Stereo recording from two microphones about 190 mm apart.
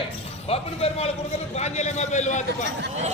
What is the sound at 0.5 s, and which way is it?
A man's voice, 30° left (ahead or behind).